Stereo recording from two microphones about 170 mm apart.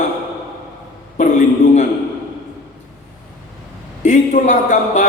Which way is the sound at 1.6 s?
85° left.